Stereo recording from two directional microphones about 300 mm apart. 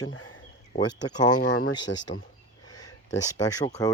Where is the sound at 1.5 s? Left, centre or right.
Left.